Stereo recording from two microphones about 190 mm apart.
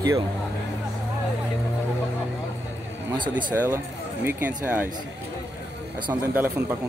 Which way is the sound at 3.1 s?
25° right (ahead or behind).